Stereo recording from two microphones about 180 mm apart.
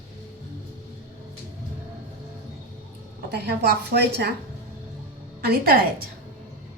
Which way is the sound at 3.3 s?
65° right (ahead or behind).